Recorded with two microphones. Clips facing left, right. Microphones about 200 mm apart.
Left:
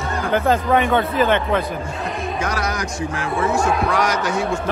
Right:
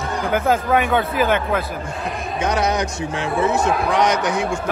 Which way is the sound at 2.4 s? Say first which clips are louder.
Right 7 dB; 20° right (ahead or behind).